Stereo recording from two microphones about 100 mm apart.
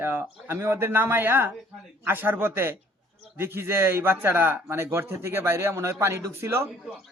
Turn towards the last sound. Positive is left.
turn(degrees=-25)  # may be behind; listen again after turning